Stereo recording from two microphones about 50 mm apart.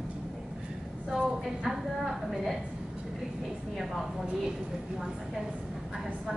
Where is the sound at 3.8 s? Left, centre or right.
Centre.